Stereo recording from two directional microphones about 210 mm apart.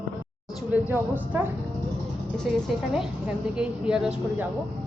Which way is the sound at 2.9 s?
5° right (ahead or behind).